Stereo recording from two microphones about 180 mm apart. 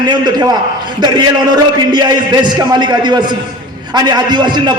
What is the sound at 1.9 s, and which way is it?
A man's voice, 25° right (ahead or behind).